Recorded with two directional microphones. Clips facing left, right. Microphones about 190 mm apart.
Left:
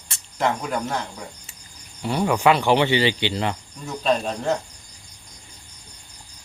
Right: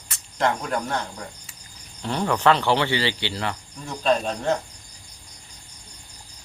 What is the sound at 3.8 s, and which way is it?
Speech, centre (ahead or behind).